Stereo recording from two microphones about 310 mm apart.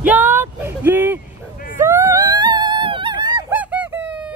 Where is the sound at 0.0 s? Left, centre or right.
Centre.